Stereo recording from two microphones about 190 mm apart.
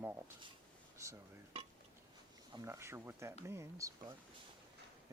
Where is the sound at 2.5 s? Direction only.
15° right (ahead or behind).